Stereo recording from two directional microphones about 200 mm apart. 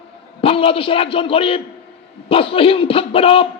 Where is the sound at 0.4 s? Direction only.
30° left (ahead or behind).